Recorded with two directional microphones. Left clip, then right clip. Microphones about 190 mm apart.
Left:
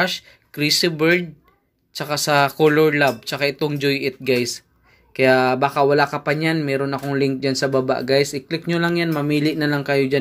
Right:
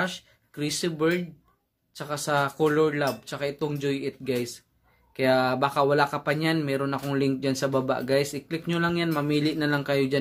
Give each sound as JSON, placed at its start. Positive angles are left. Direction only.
{"t": 0.0, "sound": "speech", "side_deg": 15}